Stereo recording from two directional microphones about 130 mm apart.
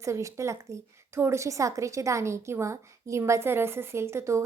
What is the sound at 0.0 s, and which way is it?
A woman's voice, 25° right (ahead or behind).